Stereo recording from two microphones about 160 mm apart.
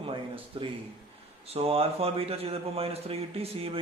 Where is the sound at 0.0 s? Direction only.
30° right (ahead or behind).